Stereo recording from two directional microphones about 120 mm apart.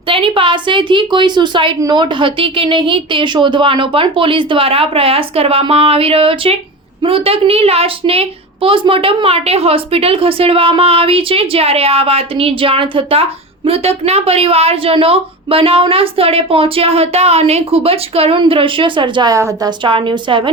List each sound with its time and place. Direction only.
0.1 s a woman's voice: 50° right (ahead or behind)
13.7 s a woman's voice: 60° right (ahead or behind); by 19.3 s 40° right (ahead or behind)
19.3 s a woman's voice: 30° right (ahead or behind)
19.8 s a woman's voice: 45° right (ahead or behind)